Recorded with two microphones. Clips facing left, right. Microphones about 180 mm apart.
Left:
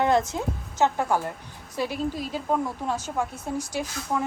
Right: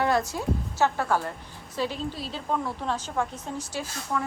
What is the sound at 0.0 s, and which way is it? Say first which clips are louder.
A woman's voice: left 2 dB; 20° left (ahead or behind).